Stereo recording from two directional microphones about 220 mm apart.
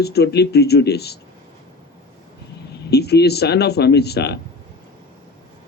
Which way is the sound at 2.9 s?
45° left (ahead or behind).